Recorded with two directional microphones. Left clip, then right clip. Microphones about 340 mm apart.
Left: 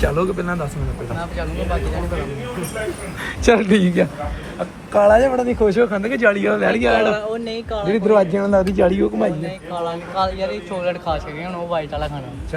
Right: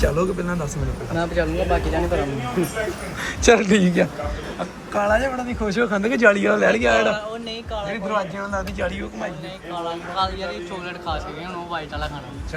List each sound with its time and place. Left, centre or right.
0.0 s speech: centre
3.4 s speech: centre
7.5 s a man's voice: left
8.7 s speech: centre
9.7 s speech: left